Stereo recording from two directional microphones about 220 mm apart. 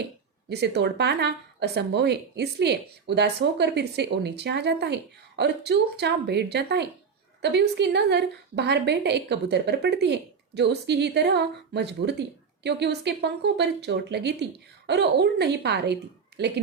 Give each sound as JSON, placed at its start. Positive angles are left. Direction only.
{"t": 0.4, "sound": "a woman's voice", "side_deg": -50}